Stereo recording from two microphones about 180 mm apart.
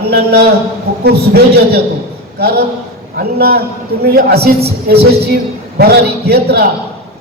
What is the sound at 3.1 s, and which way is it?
A man's voice, 60° right (ahead or behind).